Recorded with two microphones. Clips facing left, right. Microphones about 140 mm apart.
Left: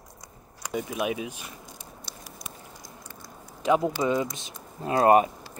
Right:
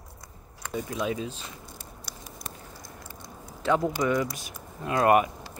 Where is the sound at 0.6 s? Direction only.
15° left (ahead or behind).